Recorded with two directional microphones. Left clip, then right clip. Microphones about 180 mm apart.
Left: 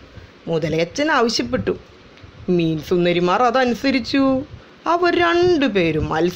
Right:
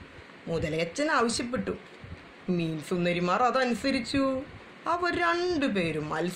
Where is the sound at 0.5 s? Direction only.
45° left (ahead or behind).